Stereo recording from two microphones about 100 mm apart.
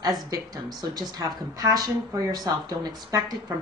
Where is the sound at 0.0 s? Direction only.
45° right (ahead or behind).